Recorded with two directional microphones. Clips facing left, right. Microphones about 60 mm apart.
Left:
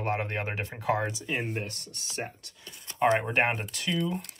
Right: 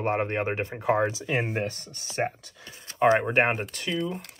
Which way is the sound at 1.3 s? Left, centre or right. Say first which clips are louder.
Right 4 dB; right.